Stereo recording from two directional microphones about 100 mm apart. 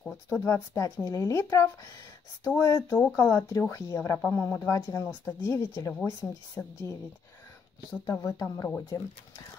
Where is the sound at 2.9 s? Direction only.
15° left (ahead or behind).